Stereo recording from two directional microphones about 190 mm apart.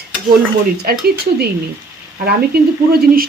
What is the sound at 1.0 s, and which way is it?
Speech, 55° right (ahead or behind).